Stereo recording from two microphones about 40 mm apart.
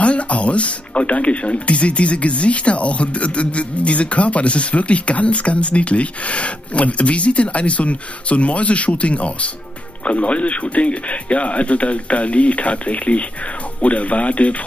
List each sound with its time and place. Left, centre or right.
0.0 s speech: left